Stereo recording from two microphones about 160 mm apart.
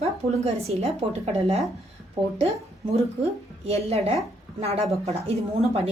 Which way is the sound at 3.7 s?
40° right (ahead or behind).